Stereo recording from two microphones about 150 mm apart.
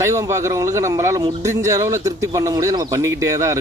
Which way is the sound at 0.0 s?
20° right (ahead or behind).